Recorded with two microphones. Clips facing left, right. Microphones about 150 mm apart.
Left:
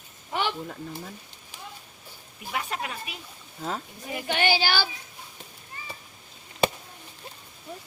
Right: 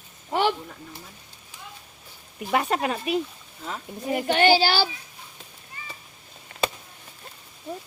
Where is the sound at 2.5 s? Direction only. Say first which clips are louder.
Right 9 dB; 60° right (ahead or behind).